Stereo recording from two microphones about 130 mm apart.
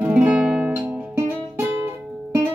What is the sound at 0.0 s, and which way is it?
Music, 10° right (ahead or behind).